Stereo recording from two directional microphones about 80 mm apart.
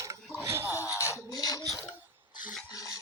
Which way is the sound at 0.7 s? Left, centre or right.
Left.